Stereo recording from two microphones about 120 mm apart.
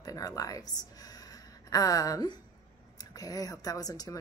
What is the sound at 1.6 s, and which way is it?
Speech, 30° left (ahead or behind).